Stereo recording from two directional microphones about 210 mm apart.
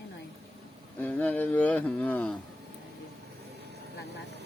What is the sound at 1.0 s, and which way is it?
Speech, 5° left (ahead or behind).